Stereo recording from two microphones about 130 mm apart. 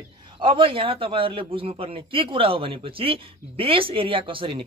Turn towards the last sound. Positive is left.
turn(degrees=-45)  # may be behind; listen again after turning